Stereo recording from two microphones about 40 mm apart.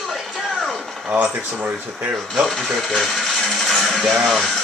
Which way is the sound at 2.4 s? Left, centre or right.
Centre.